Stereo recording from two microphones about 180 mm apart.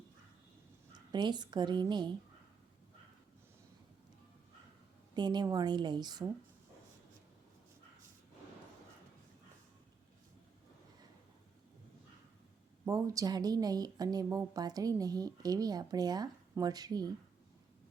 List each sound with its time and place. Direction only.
1.1 s a woman's voice: 25° right (ahead or behind)
5.1 s a woman's voice: 25° right (ahead or behind)
12.8 s a woman's voice: 20° right (ahead or behind)